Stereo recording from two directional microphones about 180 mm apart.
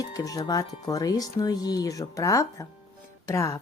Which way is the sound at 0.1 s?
20° left (ahead or behind).